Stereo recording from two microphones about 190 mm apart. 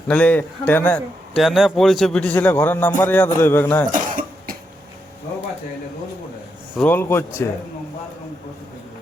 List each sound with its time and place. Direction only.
0.1 s a man's voice: 5° left (ahead or behind)
3.9 s cough: 45° right (ahead or behind)
6.7 s a man's voice: 10° left (ahead or behind)